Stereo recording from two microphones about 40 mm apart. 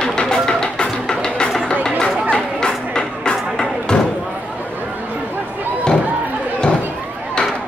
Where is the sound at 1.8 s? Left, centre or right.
Centre.